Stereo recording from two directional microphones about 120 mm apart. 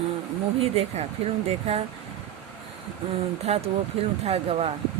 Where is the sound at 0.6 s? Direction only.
60° right (ahead or behind).